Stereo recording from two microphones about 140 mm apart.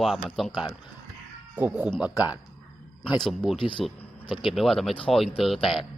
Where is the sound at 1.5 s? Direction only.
10° right (ahead or behind).